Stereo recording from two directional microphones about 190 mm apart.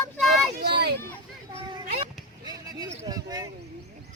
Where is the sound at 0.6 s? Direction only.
60° right (ahead or behind).